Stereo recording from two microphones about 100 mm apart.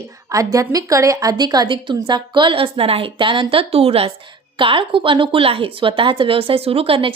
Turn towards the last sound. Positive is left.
turn(degrees=-65)  # may be behind; listen again after turning